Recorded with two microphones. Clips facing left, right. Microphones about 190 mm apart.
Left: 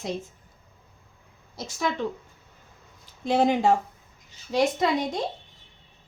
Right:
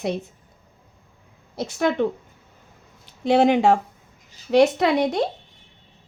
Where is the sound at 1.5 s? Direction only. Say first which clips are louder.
Right 7 dB; 60° right (ahead or behind).